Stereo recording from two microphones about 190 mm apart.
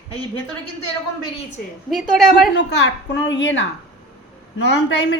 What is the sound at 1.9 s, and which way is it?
Speech, centre (ahead or behind).